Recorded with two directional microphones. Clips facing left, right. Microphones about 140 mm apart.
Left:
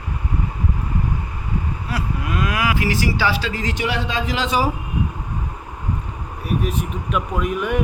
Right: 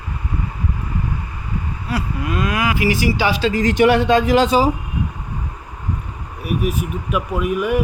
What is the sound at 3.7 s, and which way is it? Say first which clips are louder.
Speech: right 12 dB; 55° right (ahead or behind).